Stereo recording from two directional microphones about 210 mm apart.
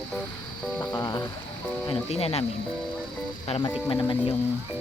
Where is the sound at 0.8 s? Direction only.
20° left (ahead or behind).